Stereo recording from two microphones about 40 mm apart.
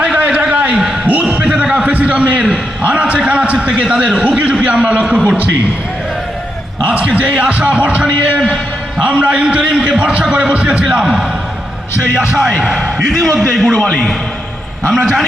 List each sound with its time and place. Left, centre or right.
0.2 s a sound: right
1.9 s a sound: right
4.6 s a man's voice: right
6.8 s a man's voice: right
11.0 s a man's voice: centre
12.4 s a man's voice: centre
14.8 s a man's voice: centre